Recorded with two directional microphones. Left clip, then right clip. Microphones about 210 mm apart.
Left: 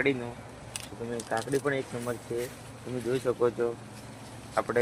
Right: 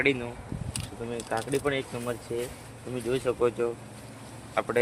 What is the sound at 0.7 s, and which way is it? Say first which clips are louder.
Speech: even; 15° right (ahead or behind).